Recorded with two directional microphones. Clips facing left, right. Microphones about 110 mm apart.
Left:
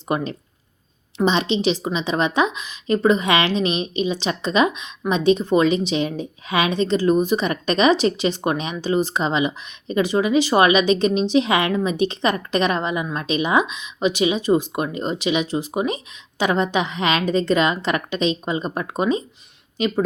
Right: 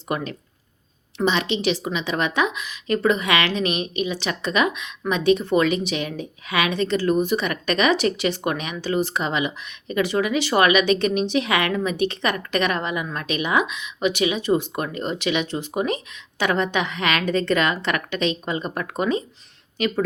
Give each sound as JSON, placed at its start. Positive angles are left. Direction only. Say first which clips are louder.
{"t": 0.1, "sound": "a woman's voice", "louder": "left 4 dB", "side_deg": 25}